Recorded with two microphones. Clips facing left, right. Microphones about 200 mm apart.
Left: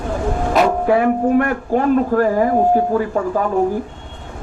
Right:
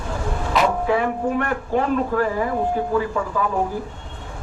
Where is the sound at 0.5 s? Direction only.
45° left (ahead or behind).